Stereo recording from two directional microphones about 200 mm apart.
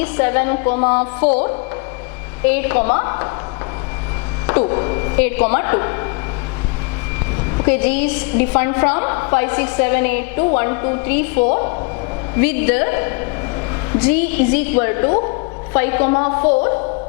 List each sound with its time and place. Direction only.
0.0 s a woman's voice: 10° left (ahead or behind)
2.4 s a woman's voice: 10° left (ahead or behind)
4.7 s a woman's voice: 20° left (ahead or behind)
7.5 s a woman's voice: 15° left (ahead or behind)